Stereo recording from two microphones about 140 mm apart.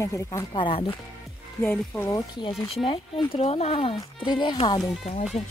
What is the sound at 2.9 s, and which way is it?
Speech, 45° left (ahead or behind).